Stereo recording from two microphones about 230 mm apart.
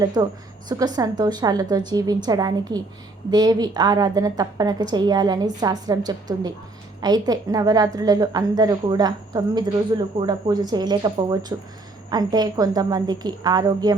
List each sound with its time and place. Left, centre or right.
0.0 s a woman's voice: centre